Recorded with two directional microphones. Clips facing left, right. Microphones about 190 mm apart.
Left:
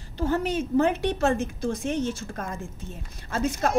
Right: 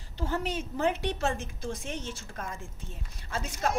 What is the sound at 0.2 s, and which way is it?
A woman's voice, 50° left (ahead or behind).